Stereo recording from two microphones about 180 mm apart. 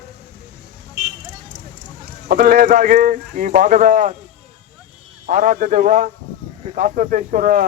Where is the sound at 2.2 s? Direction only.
50° right (ahead or behind).